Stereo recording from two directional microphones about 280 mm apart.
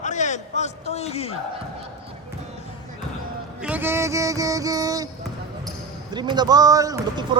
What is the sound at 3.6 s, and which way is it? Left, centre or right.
Speech, centre.